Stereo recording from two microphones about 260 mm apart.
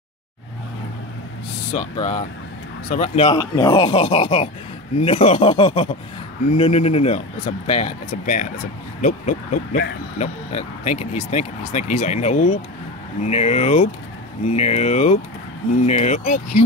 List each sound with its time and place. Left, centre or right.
1.7 s speech: centre